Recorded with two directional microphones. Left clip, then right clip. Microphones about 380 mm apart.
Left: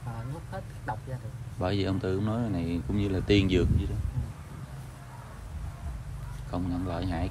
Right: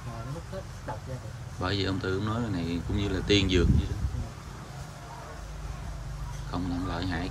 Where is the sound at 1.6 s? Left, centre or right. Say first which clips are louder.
Even; centre.